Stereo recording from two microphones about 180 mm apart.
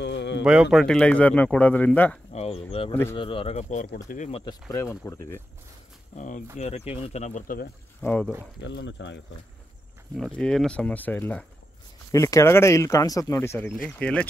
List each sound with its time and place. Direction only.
0.0 s a sound: 75° left (ahead or behind)
0.4 s speech: 5° right (ahead or behind)
2.3 s a sound: 35° left (ahead or behind)
2.9 s speech: 10° left (ahead or behind)
3.2 s speech: 30° left (ahead or behind)
4.6 s speech: 15° left (ahead or behind)
6.1 s speech: 45° left (ahead or behind)
8.0 s speech: 10° left (ahead or behind)
8.6 s speech: 80° left
10.1 s speech: 5° left (ahead or behind)